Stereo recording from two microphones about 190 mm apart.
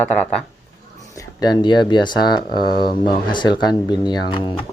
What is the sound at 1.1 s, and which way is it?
Speech, 20° left (ahead or behind).